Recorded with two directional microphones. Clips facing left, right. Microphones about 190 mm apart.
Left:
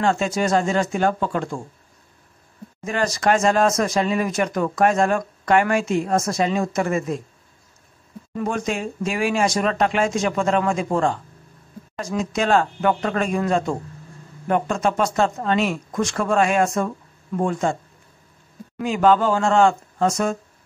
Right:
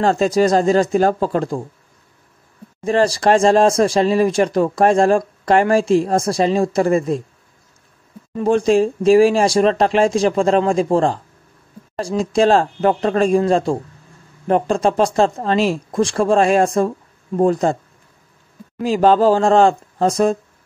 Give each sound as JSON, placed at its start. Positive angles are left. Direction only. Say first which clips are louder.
{"t": 0.0, "sound": "speech", "louder": "right 6 dB", "side_deg": -35}
{"t": 2.8, "sound": "speech", "louder": "right 7 dB", "side_deg": -30}
{"t": 8.4, "sound": "speech", "louder": "right 10 dB", "side_deg": -30}
{"t": 18.8, "sound": "speech", "louder": "right 4 dB", "side_deg": -35}